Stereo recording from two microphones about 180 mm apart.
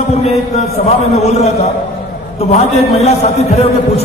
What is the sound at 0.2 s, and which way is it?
A man's voice, 35° left (ahead or behind).